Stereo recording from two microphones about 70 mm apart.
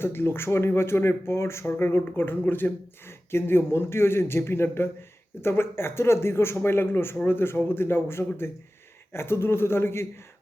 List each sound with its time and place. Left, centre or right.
0.0 s speech: left